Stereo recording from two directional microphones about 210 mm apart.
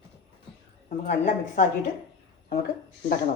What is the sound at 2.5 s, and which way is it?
Speech, 50° left (ahead or behind).